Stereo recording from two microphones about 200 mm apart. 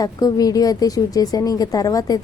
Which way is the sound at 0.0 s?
20° left (ahead or behind).